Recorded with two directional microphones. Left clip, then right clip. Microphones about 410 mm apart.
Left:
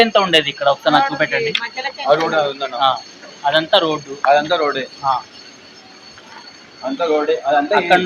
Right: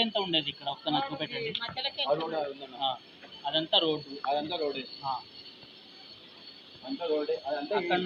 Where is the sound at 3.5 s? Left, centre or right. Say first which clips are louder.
Left 11 dB; right.